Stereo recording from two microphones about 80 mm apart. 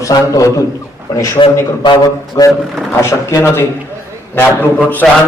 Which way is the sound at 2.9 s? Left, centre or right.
Left.